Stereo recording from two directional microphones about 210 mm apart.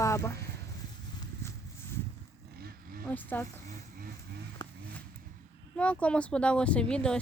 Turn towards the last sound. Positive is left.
turn(degrees=5)  # may be behind; listen again after turning